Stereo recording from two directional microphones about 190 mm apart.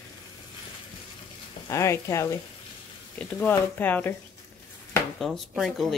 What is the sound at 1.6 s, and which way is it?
Speech, 15° left (ahead or behind).